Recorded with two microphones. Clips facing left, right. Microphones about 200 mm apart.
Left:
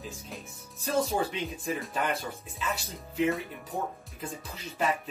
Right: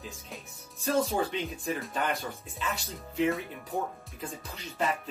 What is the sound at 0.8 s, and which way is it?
Speech, centre (ahead or behind).